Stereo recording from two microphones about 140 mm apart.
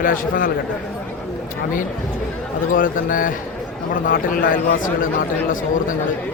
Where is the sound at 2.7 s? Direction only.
75° left (ahead or behind).